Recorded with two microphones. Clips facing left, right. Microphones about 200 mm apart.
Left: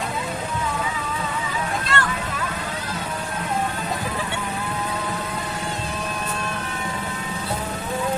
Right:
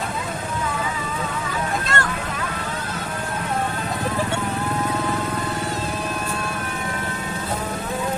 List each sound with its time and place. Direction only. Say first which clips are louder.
1.9 s vehicle: left 2 dB; 45° right (ahead or behind)